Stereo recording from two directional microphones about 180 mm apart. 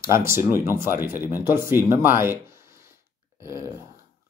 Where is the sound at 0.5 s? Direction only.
15° right (ahead or behind).